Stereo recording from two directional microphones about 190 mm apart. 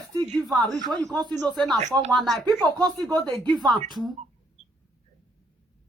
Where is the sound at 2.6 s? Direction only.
20° right (ahead or behind).